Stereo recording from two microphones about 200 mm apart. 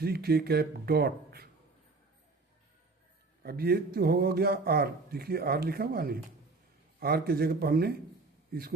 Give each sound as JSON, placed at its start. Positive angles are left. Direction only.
{"t": 0.0, "sound": "a man's voice", "side_deg": -50}
{"t": 3.4, "sound": "a man's voice", "side_deg": -50}